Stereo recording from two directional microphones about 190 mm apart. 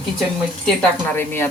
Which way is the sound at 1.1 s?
10° left (ahead or behind).